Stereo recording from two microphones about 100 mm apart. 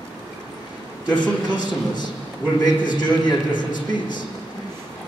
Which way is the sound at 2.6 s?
50° left (ahead or behind).